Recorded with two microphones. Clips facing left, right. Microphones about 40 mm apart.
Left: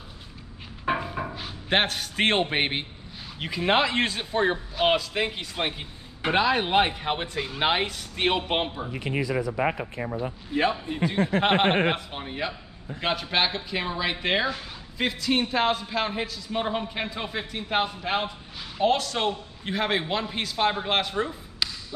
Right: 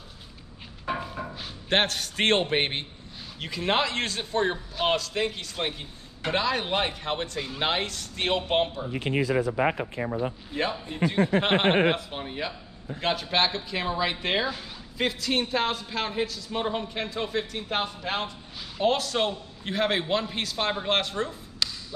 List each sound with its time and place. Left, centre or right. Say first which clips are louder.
0.9 s music: left 3 dB; centre
1.3 s a man's voice: even; centre
9.0 s speech: right 2 dB; right
10.5 s a man's voice: left 4 dB; centre